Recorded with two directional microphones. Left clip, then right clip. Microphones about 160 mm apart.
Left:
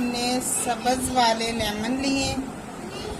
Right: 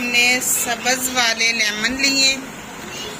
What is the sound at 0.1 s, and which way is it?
Vehicle, 30° left (ahead or behind).